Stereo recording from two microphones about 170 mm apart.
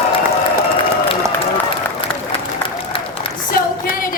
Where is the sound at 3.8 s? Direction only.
55° left (ahead or behind).